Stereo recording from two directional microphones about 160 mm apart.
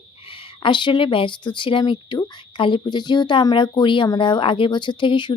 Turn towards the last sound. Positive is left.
turn(degrees=30)  # may be behind; listen again after turning